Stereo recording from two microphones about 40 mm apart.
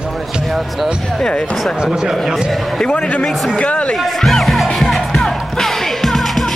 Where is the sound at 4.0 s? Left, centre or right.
Centre.